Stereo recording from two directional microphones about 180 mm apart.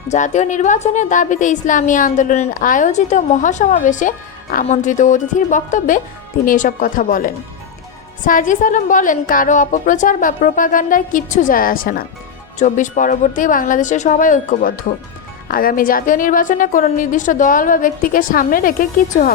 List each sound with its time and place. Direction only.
0.1 s a woman's voice: 40° left (ahead or behind)